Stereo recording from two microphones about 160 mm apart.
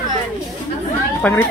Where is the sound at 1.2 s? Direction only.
5° left (ahead or behind).